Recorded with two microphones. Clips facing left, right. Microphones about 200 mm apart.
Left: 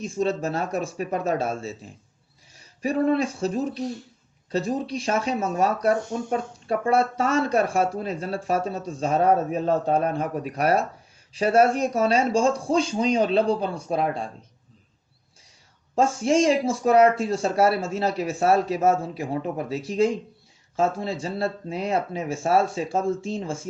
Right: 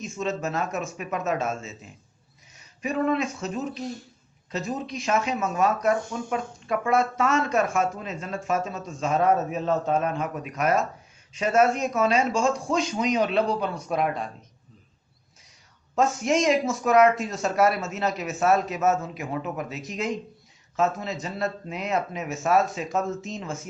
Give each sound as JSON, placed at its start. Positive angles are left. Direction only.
{"t": 0.0, "sound": "speech", "side_deg": 35}
{"t": 16.0, "sound": "speech", "side_deg": 30}